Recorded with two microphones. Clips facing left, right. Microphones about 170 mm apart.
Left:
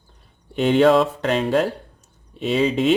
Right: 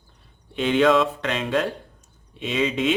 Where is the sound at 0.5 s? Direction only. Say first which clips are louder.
Left 3 dB; 40° left (ahead or behind).